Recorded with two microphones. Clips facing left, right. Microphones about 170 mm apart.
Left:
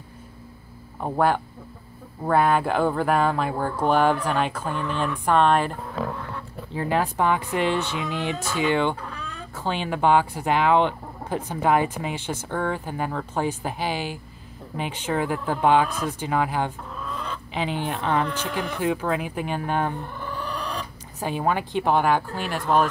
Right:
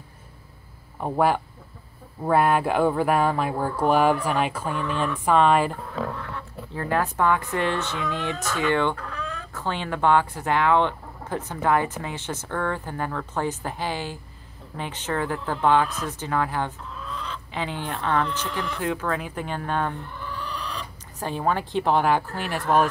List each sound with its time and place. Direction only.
1.0 s speech: centre (ahead or behind)
6.7 s speech: 15° left (ahead or behind)
9.5 s a sound: 30° left (ahead or behind)
9.8 s speech: 15° left (ahead or behind)
16.9 s chicken: 55° left (ahead or behind)
17.6 s speech: 15° left (ahead or behind)
18.4 s speech: 55° left (ahead or behind)
18.8 s speech: 15° left (ahead or behind)
20.2 s a sound: 50° left (ahead or behind)
21.2 s speech: 10° left (ahead or behind)